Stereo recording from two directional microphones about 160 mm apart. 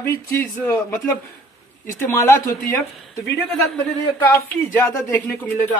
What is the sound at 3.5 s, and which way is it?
Speech, centre (ahead or behind).